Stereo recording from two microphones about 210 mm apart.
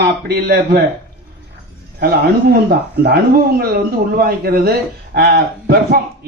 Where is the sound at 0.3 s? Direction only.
50° right (ahead or behind).